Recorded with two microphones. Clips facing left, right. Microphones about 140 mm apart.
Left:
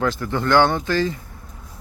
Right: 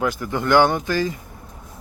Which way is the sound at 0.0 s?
15° right (ahead or behind).